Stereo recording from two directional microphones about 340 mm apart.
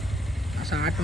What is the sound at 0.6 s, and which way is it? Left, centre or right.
Speech, centre.